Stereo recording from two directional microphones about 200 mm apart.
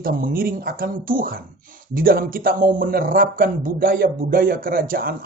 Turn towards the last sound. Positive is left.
turn(degrees=-50)  # may be behind; listen again after turning